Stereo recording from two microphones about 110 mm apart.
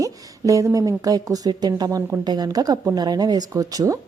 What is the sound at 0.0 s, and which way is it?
Speech, 30° right (ahead or behind).